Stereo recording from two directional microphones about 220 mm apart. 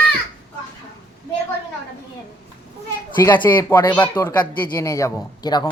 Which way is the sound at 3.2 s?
15° left (ahead or behind).